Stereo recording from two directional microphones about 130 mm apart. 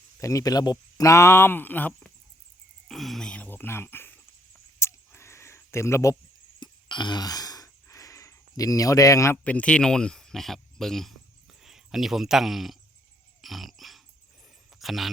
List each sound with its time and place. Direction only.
0.2 s speech: 25° left (ahead or behind)
2.9 s speech: centre (ahead or behind); by 4.1 s 15° left (ahead or behind)
4.8 s a sound: 20° left (ahead or behind)
6.6 s a sound: 35° left (ahead or behind)
9.4 s speech: 10° left (ahead or behind)
13.4 s dog: centre (ahead or behind)
14.8 s speech: centre (ahead or behind)